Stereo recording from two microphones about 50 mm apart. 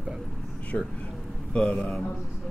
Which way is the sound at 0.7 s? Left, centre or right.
Centre.